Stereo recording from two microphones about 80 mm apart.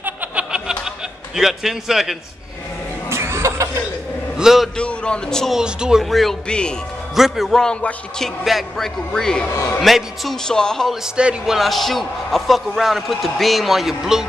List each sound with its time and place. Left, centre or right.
0.0 s music: centre
1.3 s a man's voice: centre
3.1 s a sound: right
4.4 s a man's voice: centre
4.7 s a man's voice: centre
5.5 s a man's voice: centre
11.1 s a man's voice: centre